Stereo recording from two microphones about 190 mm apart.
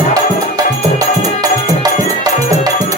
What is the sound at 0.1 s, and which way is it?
Music, 20° right (ahead or behind).